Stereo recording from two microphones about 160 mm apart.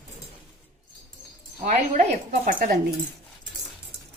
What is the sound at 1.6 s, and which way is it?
Speech, 50° right (ahead or behind).